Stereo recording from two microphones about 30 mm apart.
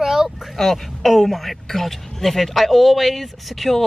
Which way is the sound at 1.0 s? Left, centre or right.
Centre.